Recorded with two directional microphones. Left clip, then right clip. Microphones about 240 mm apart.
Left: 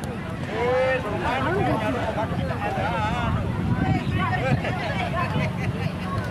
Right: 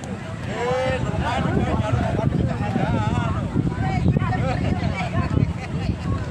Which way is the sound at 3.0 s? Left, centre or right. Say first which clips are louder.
Left 1 dB; right.